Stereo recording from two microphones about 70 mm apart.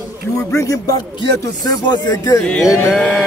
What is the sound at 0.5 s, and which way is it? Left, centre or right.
Speech, left.